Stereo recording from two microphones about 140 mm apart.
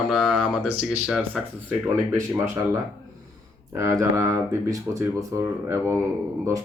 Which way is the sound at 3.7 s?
20° right (ahead or behind).